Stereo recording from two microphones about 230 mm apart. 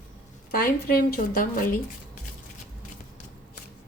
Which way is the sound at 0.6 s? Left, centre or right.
Left.